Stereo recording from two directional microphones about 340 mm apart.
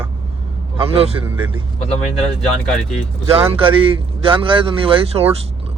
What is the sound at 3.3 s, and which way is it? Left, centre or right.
Speech, centre.